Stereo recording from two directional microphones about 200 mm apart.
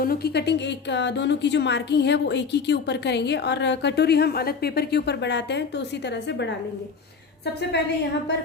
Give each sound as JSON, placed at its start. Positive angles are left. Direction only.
{"t": 0.0, "sound": "a woman's voice", "side_deg": 50}